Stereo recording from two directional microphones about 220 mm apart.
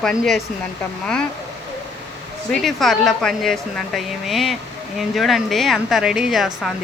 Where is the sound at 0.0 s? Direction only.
Centre (ahead or behind).